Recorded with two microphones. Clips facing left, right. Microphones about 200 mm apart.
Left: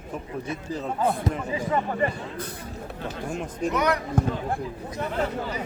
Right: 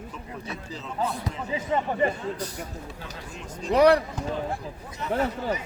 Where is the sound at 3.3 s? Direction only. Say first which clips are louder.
Left 8 dB; 55° left (ahead or behind).